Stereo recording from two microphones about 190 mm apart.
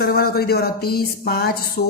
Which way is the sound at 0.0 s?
50° left (ahead or behind).